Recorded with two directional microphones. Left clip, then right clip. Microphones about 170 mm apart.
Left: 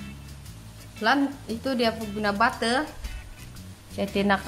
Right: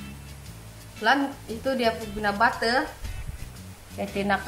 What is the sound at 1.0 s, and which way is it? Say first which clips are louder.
A woman's voice: right 1 dB; 35° left (ahead or behind).